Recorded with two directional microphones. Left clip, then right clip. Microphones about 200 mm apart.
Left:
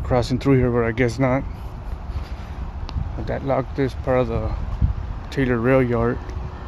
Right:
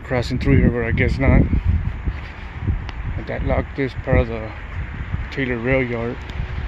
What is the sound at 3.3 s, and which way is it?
Speech, 5° left (ahead or behind).